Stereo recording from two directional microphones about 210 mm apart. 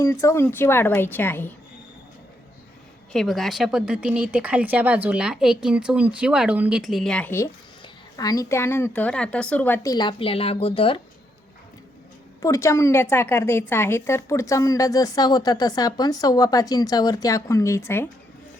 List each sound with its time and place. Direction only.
0.0 s a woman's voice: 15° left (ahead or behind)
3.1 s a woman's voice: centre (ahead or behind); by 11.0 s 25° left (ahead or behind)
12.4 s a woman's voice: 15° left (ahead or behind)